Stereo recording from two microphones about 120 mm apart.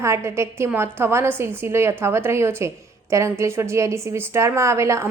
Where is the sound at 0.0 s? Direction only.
25° right (ahead or behind).